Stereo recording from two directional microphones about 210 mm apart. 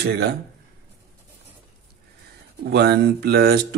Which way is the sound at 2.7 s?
50° right (ahead or behind).